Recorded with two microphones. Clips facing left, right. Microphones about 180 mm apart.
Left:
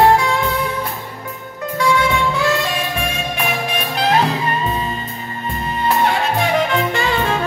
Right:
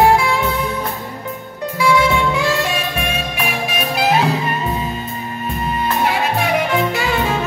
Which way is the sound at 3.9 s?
10° right (ahead or behind).